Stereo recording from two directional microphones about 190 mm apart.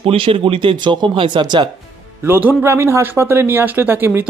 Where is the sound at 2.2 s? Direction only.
10° right (ahead or behind).